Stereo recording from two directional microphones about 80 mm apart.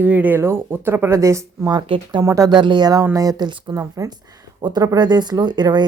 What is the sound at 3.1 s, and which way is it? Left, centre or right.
Speech, right.